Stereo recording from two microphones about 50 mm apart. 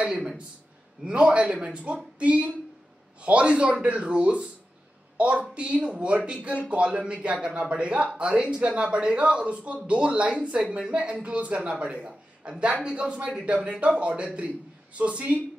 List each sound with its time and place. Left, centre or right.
0.0 s a man's voice: centre